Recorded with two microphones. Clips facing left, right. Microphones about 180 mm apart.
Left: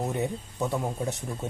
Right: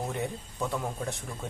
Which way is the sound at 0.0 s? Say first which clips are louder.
Left 4 dB; 20° left (ahead or behind).